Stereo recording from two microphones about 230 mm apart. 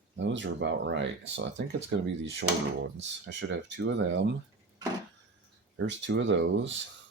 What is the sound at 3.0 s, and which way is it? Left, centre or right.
Speech, right.